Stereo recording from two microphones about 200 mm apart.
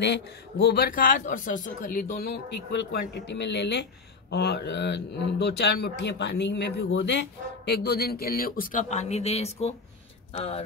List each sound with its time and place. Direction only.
0.0 s a man's voice: 55° left (ahead or behind); by 10.6 s 30° left (ahead or behind)